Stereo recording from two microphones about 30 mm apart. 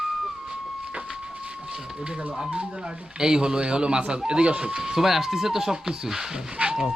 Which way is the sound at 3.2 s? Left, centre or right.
Right.